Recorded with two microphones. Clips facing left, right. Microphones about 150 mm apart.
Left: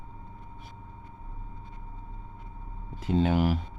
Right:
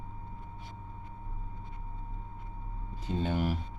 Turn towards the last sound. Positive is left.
turn(degrees=90)